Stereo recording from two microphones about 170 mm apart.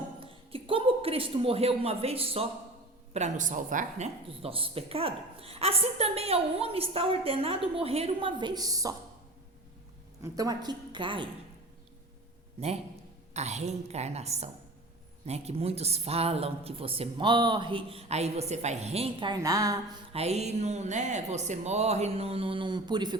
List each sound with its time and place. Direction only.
0.2 s speech: 30° right (ahead or behind)
10.3 s a woman's voice: 20° right (ahead or behind)
12.5 s a man's voice: 40° right (ahead or behind); by 20.0 s 20° right (ahead or behind)
20.1 s speech: 40° right (ahead or behind)